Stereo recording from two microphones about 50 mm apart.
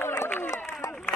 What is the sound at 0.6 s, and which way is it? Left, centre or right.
Run, left.